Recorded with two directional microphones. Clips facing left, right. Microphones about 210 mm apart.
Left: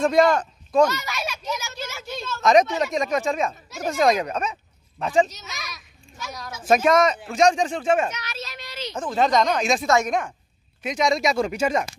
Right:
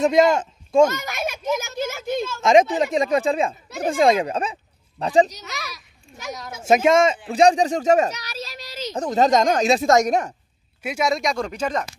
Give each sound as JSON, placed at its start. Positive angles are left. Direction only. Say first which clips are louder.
{"t": 0.0, "sound": "speech", "louder": "right 2 dB", "side_deg": -20}
{"t": 0.8, "sound": "a sound", "louder": "right 2 dB", "side_deg": -50}
{"t": 2.4, "sound": "speech", "louder": "right 2 dB", "side_deg": -25}
{"t": 5.4, "sound": "a child's voice", "louder": "right 4 dB", "side_deg": -65}
{"t": 6.7, "sound": "speech", "louder": "right 2 dB", "side_deg": -25}
{"t": 10.8, "sound": "speech", "louder": "left 1 dB", "side_deg": -5}